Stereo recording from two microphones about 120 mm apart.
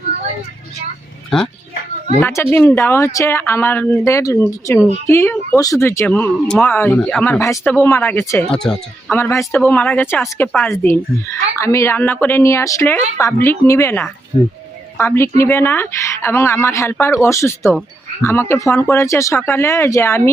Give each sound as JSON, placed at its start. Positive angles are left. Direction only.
{"t": 2.2, "sound": "speech", "side_deg": 15}
{"t": 6.1, "sound": "speech", "side_deg": 10}
{"t": 7.6, "sound": "speech", "side_deg": 10}
{"t": 8.4, "sound": "speech", "side_deg": 5}
{"t": 9.1, "sound": "speech", "side_deg": 20}